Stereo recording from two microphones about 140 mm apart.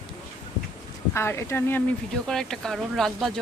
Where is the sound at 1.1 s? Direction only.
20° left (ahead or behind).